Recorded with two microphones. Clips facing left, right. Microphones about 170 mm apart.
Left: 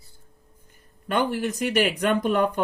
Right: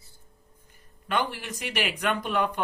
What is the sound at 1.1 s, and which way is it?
Speech, 45° left (ahead or behind).